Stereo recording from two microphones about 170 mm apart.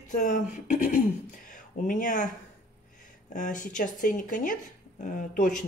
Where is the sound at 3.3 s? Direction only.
50° left (ahead or behind).